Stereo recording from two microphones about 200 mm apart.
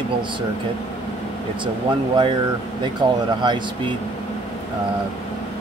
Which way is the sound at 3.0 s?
20° right (ahead or behind).